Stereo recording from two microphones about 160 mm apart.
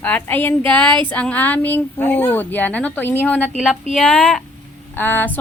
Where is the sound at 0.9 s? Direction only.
30° right (ahead or behind).